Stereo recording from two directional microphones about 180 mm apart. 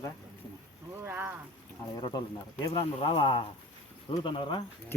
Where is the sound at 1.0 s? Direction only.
10° right (ahead or behind).